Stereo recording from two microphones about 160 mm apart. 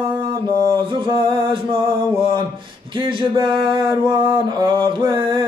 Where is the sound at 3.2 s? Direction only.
30° right (ahead or behind).